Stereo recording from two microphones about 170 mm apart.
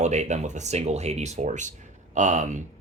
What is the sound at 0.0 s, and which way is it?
Speech, 45° right (ahead or behind).